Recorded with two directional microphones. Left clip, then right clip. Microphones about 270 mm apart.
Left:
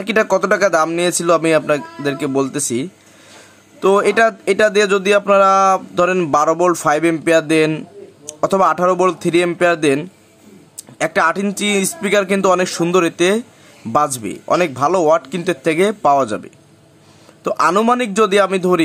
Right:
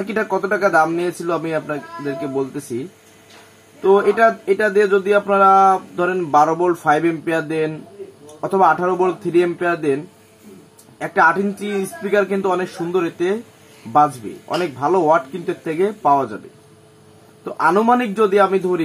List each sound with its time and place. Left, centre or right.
0.0 s speech: left
3.8 s speech: left
11.0 s speech: left
14.6 s speech: left
17.5 s speech: left